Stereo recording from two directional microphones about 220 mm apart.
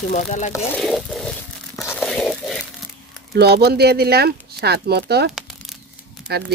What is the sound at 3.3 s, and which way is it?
Speech, 50° right (ahead or behind).